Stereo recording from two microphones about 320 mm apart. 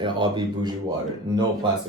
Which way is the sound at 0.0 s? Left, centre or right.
Centre.